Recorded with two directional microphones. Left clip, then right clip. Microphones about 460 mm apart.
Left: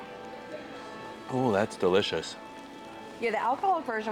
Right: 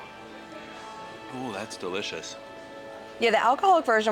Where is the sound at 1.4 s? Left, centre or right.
Left.